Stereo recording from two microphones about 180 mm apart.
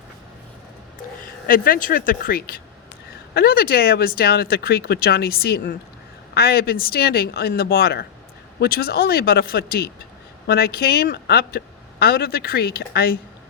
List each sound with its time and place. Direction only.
1.5 s speech: 50° left (ahead or behind)